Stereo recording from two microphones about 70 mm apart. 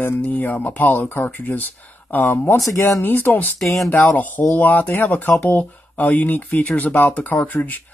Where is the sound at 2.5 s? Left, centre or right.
Left.